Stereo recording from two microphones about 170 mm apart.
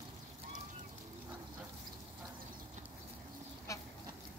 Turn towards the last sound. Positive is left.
turn(degrees=20)  # may be behind; listen again after turning